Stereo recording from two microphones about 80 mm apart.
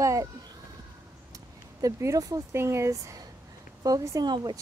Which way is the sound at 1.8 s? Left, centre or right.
Right.